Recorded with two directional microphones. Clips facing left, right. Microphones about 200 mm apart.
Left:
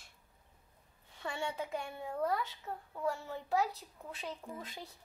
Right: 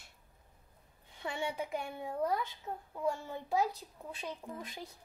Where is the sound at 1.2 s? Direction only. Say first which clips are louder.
Right 1 dB; 15° right (ahead or behind).